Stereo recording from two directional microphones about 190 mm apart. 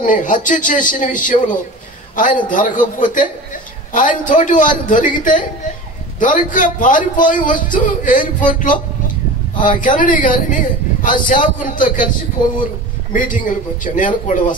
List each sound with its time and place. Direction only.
0.0 s a man's voice: 45° left (ahead or behind)
13.1 s a man's voice: 45° left (ahead or behind)